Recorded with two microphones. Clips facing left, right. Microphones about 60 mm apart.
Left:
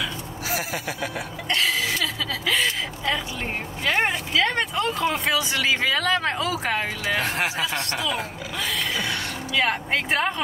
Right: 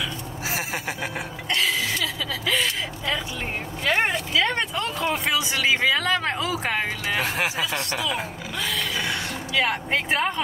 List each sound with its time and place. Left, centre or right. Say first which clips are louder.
0.5 s a sound: left 1 dB; right
3.8 s speech: even; centre
5.3 s speech: even; centre
9.5 s speech: even; centre